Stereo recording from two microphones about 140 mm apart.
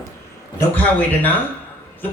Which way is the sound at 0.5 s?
10° left (ahead or behind).